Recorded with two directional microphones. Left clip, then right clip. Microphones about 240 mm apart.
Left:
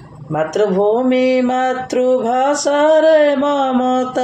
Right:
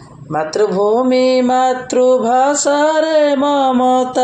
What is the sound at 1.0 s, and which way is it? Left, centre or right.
Mantra, right.